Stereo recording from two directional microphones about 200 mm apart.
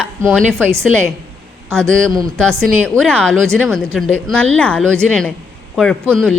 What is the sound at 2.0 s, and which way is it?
Speech, 20° right (ahead or behind).